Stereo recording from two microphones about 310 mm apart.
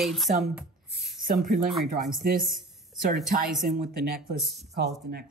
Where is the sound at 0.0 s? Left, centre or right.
Centre.